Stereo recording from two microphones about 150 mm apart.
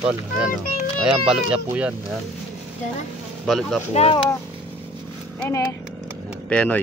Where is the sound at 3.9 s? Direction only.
40° left (ahead or behind).